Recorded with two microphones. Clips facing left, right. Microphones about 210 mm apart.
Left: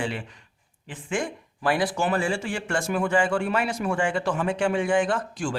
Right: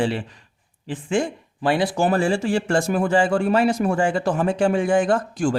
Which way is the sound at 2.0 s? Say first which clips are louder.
Right 6 dB; 35° right (ahead or behind).